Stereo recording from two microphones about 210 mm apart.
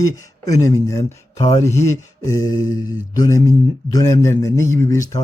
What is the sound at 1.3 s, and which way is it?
Speech, 25° left (ahead or behind).